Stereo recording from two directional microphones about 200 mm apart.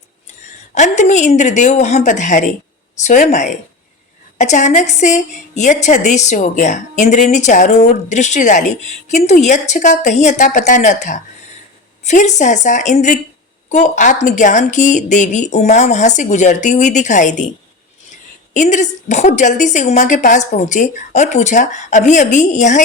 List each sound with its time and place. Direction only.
0.7 s a woman's voice: 35° left (ahead or behind)
18.5 s a woman's voice: 35° left (ahead or behind)